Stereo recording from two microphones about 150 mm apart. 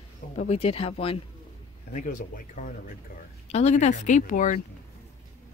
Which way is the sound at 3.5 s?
50° left (ahead or behind).